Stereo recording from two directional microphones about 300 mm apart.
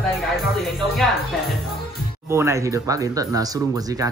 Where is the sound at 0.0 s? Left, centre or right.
Centre.